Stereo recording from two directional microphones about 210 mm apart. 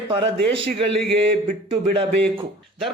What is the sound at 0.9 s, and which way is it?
Speech, 5° left (ahead or behind).